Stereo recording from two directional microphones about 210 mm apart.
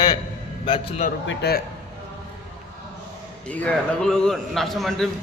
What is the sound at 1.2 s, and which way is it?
Speech, 55° left (ahead or behind).